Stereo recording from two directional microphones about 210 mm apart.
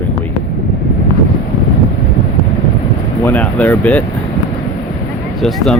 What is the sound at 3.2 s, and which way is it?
Speech, 10° left (ahead or behind).